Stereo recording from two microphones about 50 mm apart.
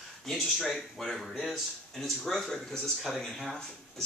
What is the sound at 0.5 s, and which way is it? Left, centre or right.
Speech, centre.